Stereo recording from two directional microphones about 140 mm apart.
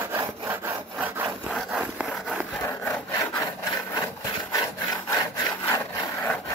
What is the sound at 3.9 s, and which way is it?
Wood, 25° left (ahead or behind).